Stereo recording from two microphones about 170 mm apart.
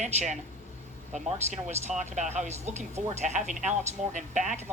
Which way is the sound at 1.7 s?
45° right (ahead or behind).